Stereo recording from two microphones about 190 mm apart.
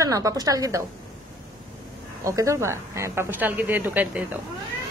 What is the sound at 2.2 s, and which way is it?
A woman's voice, 15° right (ahead or behind).